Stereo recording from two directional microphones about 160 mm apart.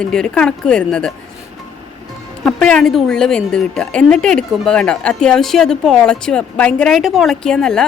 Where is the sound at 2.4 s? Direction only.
5° left (ahead or behind).